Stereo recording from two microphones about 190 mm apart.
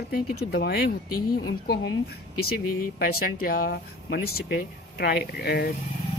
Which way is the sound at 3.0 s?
50° left (ahead or behind).